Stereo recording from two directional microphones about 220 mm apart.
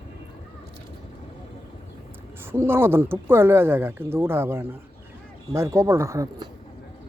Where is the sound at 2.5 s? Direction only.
10° right (ahead or behind).